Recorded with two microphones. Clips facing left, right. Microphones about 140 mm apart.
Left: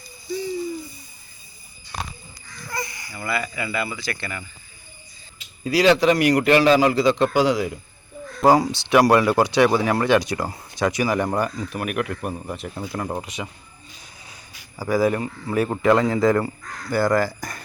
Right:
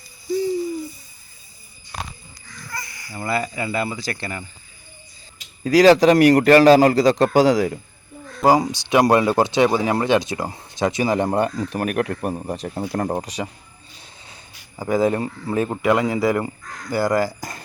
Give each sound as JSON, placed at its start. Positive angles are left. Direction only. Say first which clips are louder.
{"t": 2.7, "sound": "a sound", "louder": "left 5 dB", "side_deg": 20}
{"t": 3.1, "sound": "a man's voice", "louder": "right 5 dB", "side_deg": -35}
{"t": 5.6, "sound": "a man's voice", "louder": "right 4 dB", "side_deg": -40}
{"t": 8.4, "sound": "a man's voice", "louder": "even", "side_deg": -15}
{"t": 14.8, "sound": "speech", "louder": "right 1 dB", "side_deg": -25}
{"t": 15.7, "sound": "speech", "louder": "left 2 dB", "side_deg": -15}